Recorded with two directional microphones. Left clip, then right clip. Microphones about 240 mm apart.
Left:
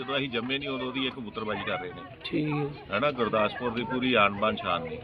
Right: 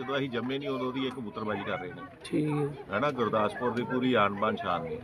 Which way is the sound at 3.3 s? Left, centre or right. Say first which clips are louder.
Left 1 dB; centre.